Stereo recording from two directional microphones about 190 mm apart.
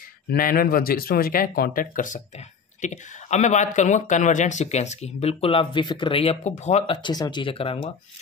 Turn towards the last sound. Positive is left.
turn(degrees=30)  # may be behind; listen again after turning